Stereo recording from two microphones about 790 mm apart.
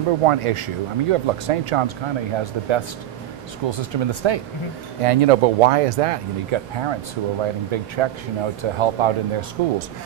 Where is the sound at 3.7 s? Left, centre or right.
Right.